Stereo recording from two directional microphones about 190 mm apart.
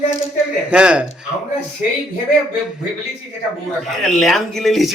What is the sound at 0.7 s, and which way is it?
Speech, 5° right (ahead or behind).